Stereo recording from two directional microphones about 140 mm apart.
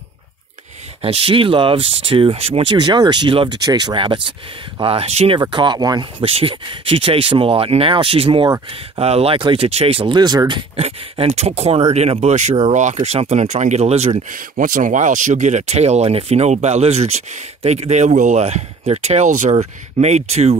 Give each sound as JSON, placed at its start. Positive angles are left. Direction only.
{"t": 1.0, "sound": "speech", "side_deg": -40}
{"t": 5.4, "sound": "speech", "side_deg": -30}
{"t": 6.2, "sound": "speech", "side_deg": -40}
{"t": 10.8, "sound": "speech", "side_deg": -45}
{"t": 14.3, "sound": "speech", "side_deg": -70}
{"t": 19.5, "sound": "speech", "side_deg": -50}